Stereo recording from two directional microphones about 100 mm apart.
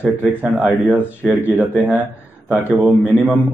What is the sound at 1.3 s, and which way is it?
Speech, 10° right (ahead or behind).